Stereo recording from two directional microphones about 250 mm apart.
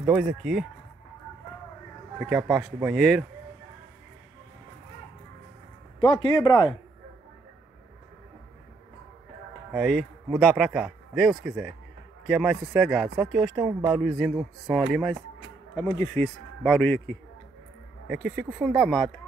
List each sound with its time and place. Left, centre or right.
0.0 s speech: centre
2.1 s speech: centre
5.9 s a man's voice: centre
9.7 s speech: centre
15.7 s a man's voice: centre
18.0 s speech: centre